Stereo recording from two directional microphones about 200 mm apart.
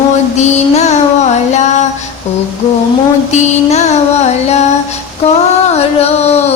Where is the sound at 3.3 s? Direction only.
35° left (ahead or behind).